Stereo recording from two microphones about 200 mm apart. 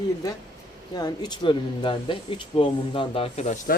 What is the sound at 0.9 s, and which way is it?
Speech, 20° left (ahead or behind).